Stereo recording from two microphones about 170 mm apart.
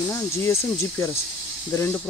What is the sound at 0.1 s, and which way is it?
Speech, 15° left (ahead or behind).